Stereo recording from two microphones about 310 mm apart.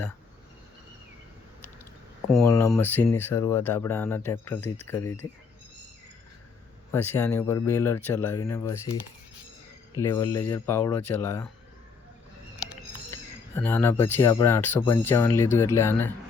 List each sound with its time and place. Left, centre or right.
2.3 s speech: centre
6.9 s speech: centre
10.0 s speech: centre
13.6 s speech: centre